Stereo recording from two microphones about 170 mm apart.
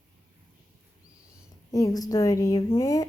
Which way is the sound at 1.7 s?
20° left (ahead or behind).